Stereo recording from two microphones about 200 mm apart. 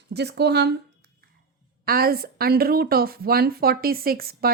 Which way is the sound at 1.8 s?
50° right (ahead or behind).